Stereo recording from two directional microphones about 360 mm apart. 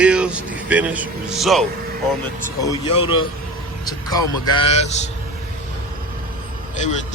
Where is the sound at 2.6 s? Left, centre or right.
Centre.